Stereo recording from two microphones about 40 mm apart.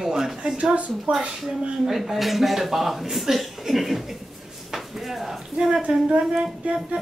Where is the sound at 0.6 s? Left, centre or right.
Right.